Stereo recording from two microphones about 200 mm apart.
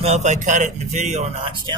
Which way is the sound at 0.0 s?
35° right (ahead or behind).